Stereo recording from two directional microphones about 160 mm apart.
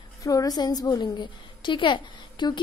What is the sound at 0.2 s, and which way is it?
A woman's voice, 20° left (ahead or behind).